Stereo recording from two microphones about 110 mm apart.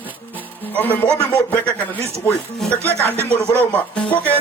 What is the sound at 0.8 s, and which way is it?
Music, 15° left (ahead or behind).